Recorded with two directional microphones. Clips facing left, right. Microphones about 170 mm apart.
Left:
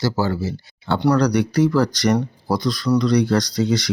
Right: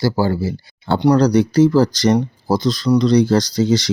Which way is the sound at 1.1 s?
25° right (ahead or behind).